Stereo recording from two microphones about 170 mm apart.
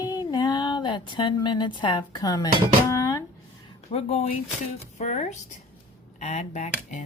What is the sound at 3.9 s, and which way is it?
Speech, 35° left (ahead or behind).